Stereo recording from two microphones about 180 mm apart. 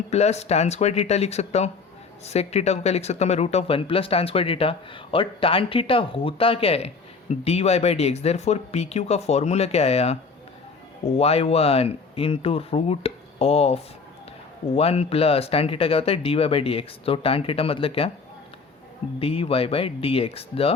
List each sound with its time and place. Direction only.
0.1 s speech: 35° left (ahead or behind)
14.8 s speech: 35° left (ahead or behind)
19.2 s speech: 30° left (ahead or behind)